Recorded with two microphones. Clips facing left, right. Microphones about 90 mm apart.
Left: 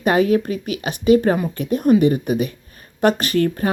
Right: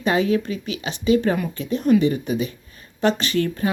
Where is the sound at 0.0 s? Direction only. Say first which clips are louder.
Left 4 dB; 45° left (ahead or behind).